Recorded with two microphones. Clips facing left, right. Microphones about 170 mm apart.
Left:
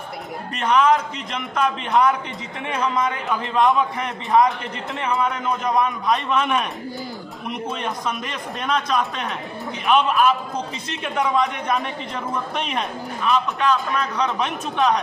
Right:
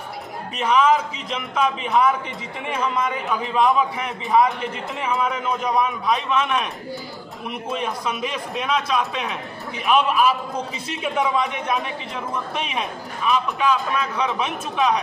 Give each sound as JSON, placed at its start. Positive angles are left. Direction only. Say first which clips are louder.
{"t": 0.6, "sound": "a man's voice", "louder": "even", "side_deg": -5}